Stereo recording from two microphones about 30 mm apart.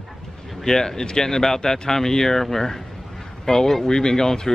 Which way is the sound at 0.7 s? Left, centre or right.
Centre.